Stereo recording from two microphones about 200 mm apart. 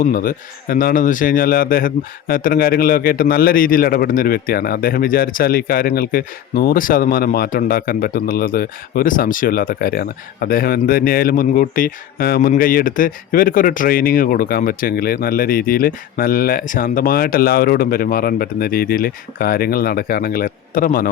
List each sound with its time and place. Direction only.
0.0 s a man's voice: 45° left (ahead or behind)